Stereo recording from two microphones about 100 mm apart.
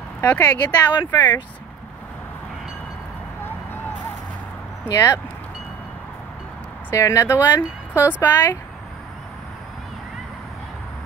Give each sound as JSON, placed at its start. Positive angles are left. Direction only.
{"t": 0.2, "sound": "speech", "side_deg": 15}
{"t": 0.7, "sound": "speech", "side_deg": 45}
{"t": 4.8, "sound": "speech", "side_deg": 30}
{"t": 6.9, "sound": "speech", "side_deg": 30}